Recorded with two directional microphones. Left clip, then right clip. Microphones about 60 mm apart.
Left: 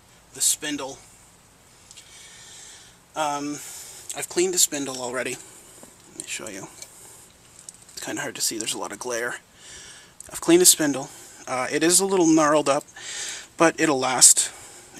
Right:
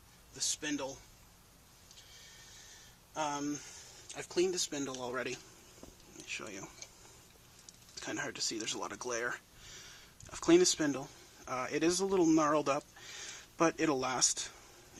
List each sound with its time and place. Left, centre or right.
0.3 s a man's voice: centre
3.2 s speech: left
7.7 s speech: left